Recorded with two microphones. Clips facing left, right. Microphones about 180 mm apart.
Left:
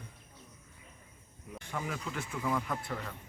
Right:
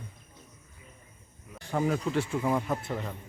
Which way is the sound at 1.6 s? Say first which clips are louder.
Right 10 dB; 35° right (ahead or behind).